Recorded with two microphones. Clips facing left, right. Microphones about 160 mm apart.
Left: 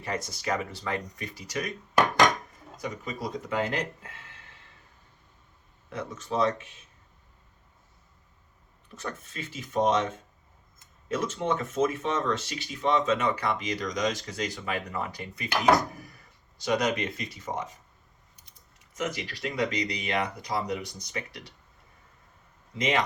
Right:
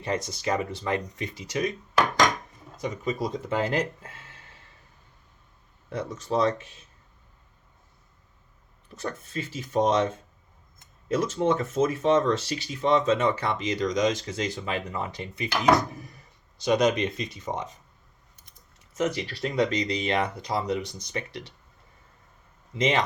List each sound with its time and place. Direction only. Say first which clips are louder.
0.0 s speech: right 4 dB; 20° right (ahead or behind)
2.7 s speech: right 6 dB; 20° right (ahead or behind)
5.9 s speech: right 4 dB; 35° right (ahead or behind)
9.0 s speech: right 4 dB; 35° right (ahead or behind)
11.1 s speech: right 4 dB; 35° right (ahead or behind)
15.5 s speech: right 1 dB; centre (ahead or behind)
15.9 s speech: right 3 dB; 20° right (ahead or behind)
19.0 s speech: right 4 dB; 35° right (ahead or behind)
19.5 s speech: right 4 dB; 25° right (ahead or behind)